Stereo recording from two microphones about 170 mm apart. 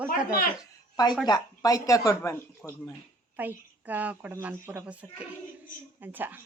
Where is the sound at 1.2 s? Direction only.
20° left (ahead or behind).